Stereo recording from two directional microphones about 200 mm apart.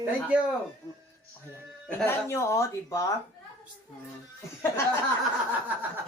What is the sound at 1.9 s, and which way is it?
Speech, 10° left (ahead or behind).